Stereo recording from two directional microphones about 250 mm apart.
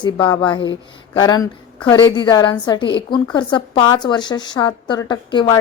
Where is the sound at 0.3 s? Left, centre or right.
Centre.